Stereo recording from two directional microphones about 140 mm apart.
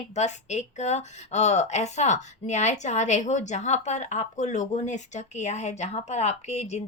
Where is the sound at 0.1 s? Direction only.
55° left (ahead or behind).